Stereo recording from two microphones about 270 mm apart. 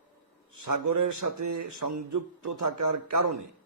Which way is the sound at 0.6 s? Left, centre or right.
Right.